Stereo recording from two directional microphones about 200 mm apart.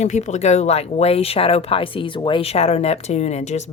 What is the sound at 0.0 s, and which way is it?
A woman's voice, 35° left (ahead or behind).